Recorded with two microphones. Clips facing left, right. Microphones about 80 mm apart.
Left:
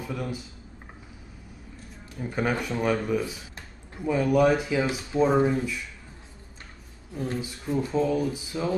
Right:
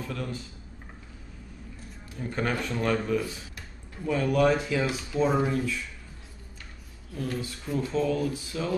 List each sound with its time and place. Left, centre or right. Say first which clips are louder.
0.0 s speech: left 2 dB; centre
2.1 s speech: left 2 dB; centre
7.2 s speech: left 1 dB; centre